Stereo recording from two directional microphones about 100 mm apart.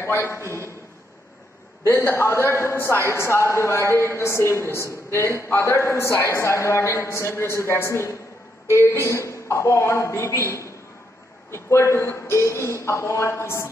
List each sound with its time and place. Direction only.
0.0 s a man's voice: 25° left (ahead or behind)
1.9 s a man's voice: 25° left (ahead or behind)